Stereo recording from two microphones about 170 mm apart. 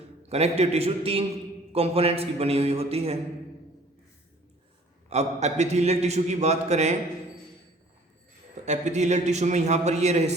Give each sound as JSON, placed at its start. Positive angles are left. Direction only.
{"t": 0.3, "sound": "a man's voice", "side_deg": -40}
{"t": 5.0, "sound": "a man's voice", "side_deg": -40}
{"t": 8.6, "sound": "a man's voice", "side_deg": -40}